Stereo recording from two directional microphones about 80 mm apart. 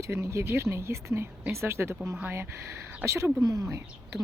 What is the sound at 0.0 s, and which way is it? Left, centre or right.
Speech, right.